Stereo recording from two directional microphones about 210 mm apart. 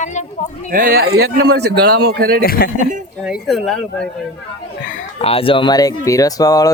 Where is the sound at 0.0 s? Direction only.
35° left (ahead or behind).